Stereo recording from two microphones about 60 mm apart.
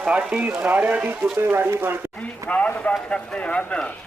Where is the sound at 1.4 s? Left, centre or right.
Right.